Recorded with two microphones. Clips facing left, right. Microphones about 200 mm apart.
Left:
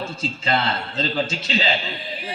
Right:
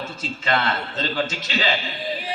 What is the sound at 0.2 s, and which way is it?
A man's voice, 30° left (ahead or behind).